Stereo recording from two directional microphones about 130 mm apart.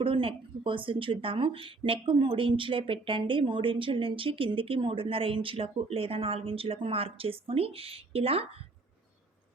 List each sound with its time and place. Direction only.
0.0 s speech: 45° right (ahead or behind)